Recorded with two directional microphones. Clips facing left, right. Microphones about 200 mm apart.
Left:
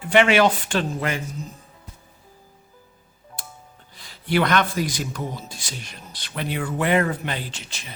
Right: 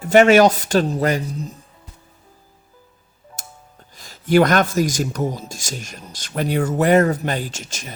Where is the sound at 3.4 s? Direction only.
45° right (ahead or behind).